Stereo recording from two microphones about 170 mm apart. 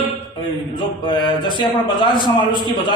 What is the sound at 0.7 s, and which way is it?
A man's voice, 25° left (ahead or behind).